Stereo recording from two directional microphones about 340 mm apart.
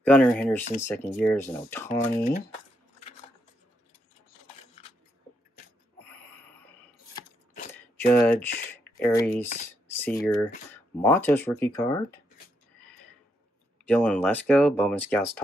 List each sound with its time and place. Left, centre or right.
0.0 s speech: centre
2.1 s speech: left
6.0 s a sound: centre
8.1 s speech: centre
13.8 s speech: centre